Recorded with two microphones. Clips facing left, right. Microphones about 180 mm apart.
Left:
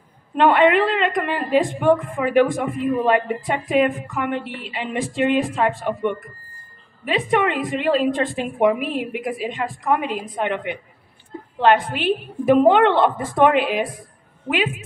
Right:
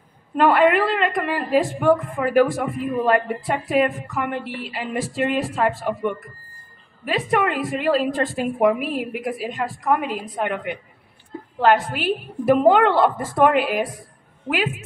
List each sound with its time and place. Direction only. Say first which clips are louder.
0.4 s a woman's voice: left 1 dB; 5° right (ahead or behind)